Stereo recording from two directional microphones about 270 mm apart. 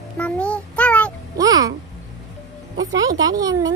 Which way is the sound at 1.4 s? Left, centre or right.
Centre.